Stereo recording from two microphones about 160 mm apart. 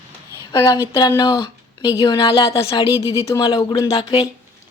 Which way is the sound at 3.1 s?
20° left (ahead or behind).